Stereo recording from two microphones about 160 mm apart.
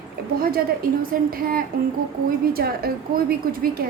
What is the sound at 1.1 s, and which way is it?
Speech, 60° right (ahead or behind).